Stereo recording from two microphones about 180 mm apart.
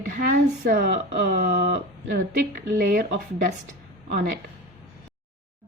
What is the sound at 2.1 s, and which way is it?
Speech, 50° right (ahead or behind).